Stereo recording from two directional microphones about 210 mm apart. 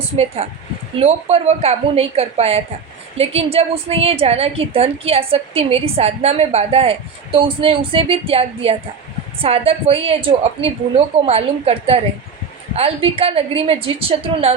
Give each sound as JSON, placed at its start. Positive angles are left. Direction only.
{"t": 0.4, "sound": "a woman's voice", "side_deg": -30}